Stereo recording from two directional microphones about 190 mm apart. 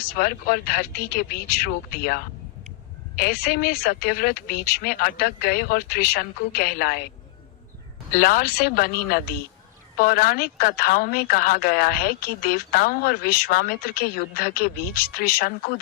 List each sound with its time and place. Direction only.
0.0 s speech: 55° left (ahead or behind)
8.1 s speech: 50° left (ahead or behind)